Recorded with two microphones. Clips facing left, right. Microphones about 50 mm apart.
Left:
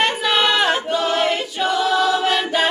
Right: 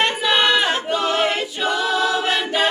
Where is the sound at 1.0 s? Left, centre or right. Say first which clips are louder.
Left 1 dB; centre.